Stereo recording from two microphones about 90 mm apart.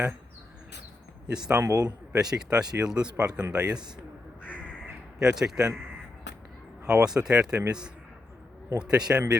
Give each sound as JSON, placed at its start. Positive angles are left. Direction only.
{"t": 1.3, "sound": "speech", "side_deg": -10}
{"t": 1.6, "sound": "a man's voice", "side_deg": -40}
{"t": 2.1, "sound": "speech", "side_deg": -10}
{"t": 5.2, "sound": "speech", "side_deg": -5}
{"t": 6.8, "sound": "speech", "side_deg": -10}
{"t": 8.8, "sound": "speech", "side_deg": -10}